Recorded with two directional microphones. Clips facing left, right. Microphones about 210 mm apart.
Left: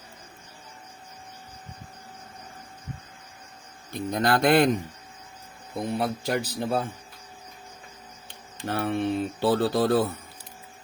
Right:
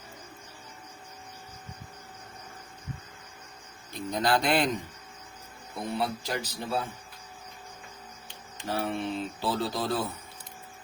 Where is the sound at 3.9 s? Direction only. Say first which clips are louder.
Left 3 dB; 55° left (ahead or behind).